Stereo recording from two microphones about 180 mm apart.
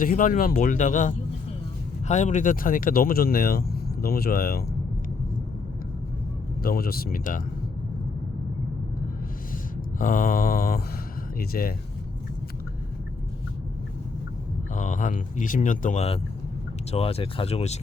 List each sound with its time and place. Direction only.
0.0 s speech: 50° left (ahead or behind)
6.6 s speech: 55° left (ahead or behind)
10.0 s speech: 50° left (ahead or behind)
14.7 s speech: 45° left (ahead or behind)